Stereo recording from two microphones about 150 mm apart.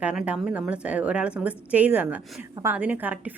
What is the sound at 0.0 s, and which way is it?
Speech, 5° right (ahead or behind).